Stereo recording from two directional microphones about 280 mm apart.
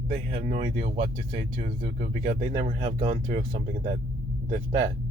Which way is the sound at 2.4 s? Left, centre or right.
Centre.